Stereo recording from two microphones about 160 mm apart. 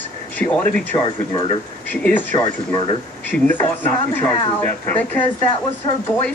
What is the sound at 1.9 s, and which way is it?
Speech, 10° left (ahead or behind).